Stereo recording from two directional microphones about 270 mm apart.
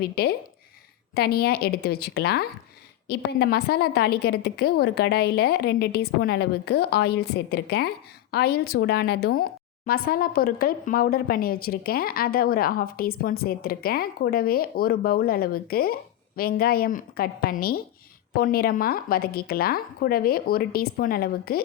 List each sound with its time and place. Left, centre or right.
0.0 s a woman's voice: left